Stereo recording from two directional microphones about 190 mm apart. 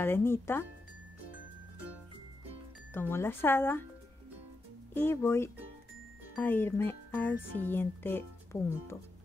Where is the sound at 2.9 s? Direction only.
10° left (ahead or behind).